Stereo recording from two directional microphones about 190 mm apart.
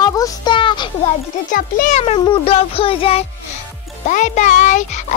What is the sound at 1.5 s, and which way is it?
A child's voice, 40° left (ahead or behind).